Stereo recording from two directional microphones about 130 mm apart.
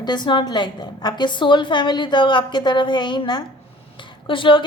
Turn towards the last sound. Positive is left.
turn(degrees=40)  # may be behind; listen again after turning